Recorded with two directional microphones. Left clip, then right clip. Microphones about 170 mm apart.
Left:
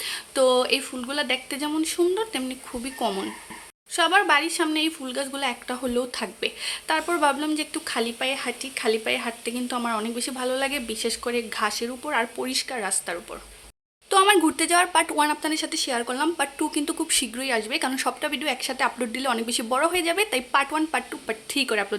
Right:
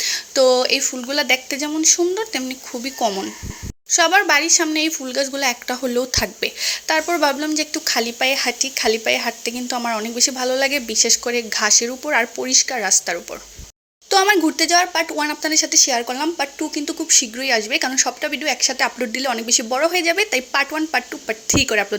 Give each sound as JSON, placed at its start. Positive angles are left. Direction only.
{"t": 0.0, "sound": "speech", "side_deg": -15}
{"t": 14.1, "sound": "speech", "side_deg": -15}
{"t": 17.4, "sound": "speech", "side_deg": -15}